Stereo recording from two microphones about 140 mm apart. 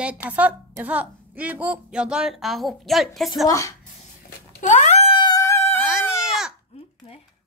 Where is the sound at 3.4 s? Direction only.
20° left (ahead or behind).